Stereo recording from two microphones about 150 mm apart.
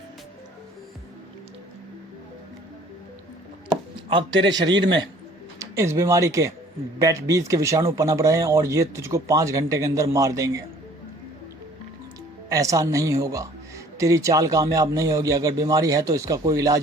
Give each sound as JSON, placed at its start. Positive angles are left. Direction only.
{"t": 3.7, "sound": "chopping", "side_deg": -30}
{"t": 5.5, "sound": "speech", "side_deg": -20}
{"t": 12.5, "sound": "speech", "side_deg": -20}